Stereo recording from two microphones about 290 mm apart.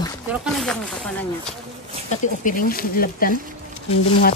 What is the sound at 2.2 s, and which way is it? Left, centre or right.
Speech, left.